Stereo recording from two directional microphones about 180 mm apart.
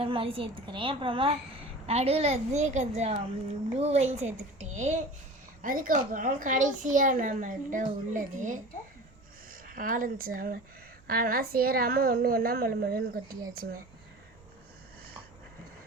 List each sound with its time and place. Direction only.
0.0 s a woman's voice: 30° right (ahead or behind); by 13.3 s 55° right (ahead or behind)